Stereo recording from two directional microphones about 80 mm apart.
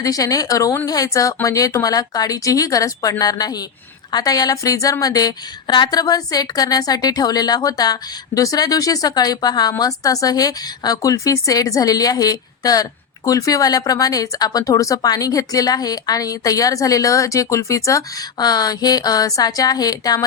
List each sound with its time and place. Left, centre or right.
0.0 s speech: left